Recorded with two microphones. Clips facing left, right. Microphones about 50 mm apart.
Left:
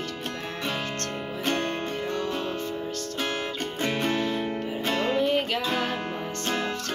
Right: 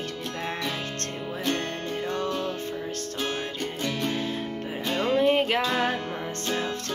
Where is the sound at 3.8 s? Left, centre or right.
Left.